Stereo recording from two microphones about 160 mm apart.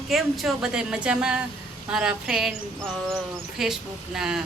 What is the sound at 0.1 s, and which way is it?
Speech, 5° right (ahead or behind).